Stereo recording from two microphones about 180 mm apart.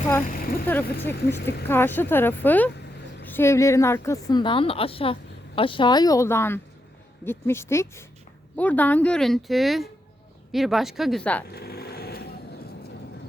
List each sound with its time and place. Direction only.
0.6 s a woman's voice: 10° left (ahead or behind)
1.4 s speech: 65° left (ahead or behind)
1.6 s a woman's voice: 10° left (ahead or behind)
11.5 s vehicle: 60° left (ahead or behind)